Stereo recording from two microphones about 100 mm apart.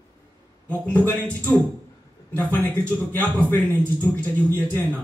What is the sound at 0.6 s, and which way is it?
Speech, 15° left (ahead or behind).